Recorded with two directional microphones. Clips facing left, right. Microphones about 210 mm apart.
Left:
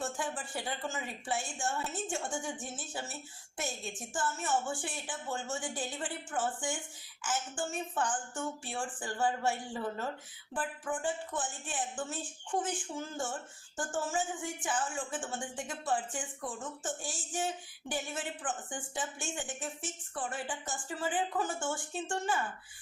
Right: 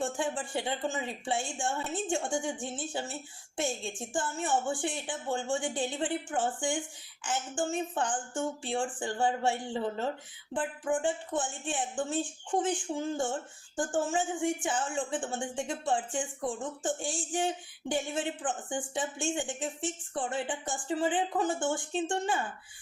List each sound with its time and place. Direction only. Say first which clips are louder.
0.0 s a woman's voice: right 5 dB; 25° right (ahead or behind)